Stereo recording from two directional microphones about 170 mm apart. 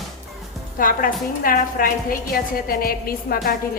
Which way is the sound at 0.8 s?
55° left (ahead or behind).